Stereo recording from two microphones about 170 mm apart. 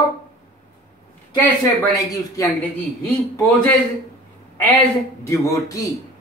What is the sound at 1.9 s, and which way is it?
Speech, 20° left (ahead or behind).